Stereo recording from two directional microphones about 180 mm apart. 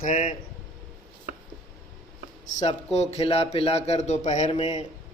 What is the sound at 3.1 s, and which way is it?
Speech, 35° left (ahead or behind).